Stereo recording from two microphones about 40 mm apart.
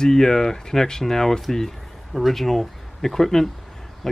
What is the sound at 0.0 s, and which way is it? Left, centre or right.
Speech, centre.